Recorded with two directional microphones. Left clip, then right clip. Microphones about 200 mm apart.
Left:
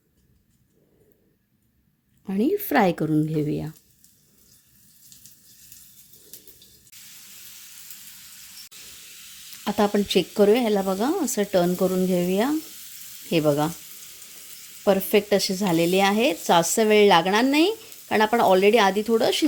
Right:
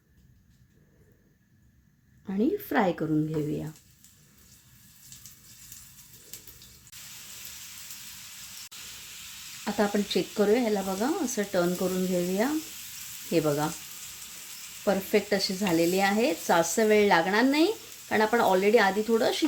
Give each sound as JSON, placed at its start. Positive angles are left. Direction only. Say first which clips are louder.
{"t": 2.2, "sound": "speech", "louder": "left 4 dB", "side_deg": 40}
{"t": 9.6, "sound": "speech", "louder": "left 5 dB", "side_deg": 40}
{"t": 14.8, "sound": "speech", "louder": "left 6 dB", "side_deg": 40}